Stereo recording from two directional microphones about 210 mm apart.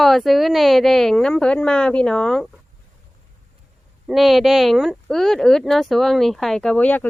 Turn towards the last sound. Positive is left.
turn(degrees=5)  # may be behind; listen again after turning